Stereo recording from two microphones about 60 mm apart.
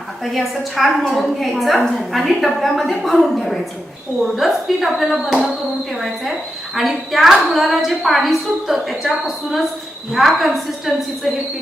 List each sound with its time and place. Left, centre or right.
0.3 s a woman's voice: centre